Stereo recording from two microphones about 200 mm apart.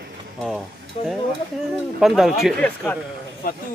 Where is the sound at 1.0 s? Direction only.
30° left (ahead or behind).